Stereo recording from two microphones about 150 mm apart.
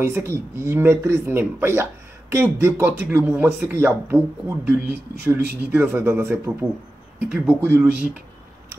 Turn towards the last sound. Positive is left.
turn(degrees=-15)  # may be behind; listen again after turning